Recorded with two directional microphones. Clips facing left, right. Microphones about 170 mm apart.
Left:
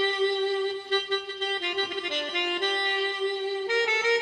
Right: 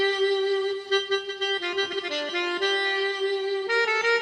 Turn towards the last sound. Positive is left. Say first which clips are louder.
# right 1 dB
turn(degrees=20)  # may be behind; listen again after turning